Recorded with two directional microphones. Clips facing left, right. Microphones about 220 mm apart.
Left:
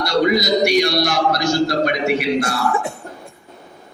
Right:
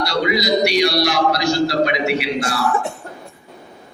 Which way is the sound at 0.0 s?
50° left (ahead or behind).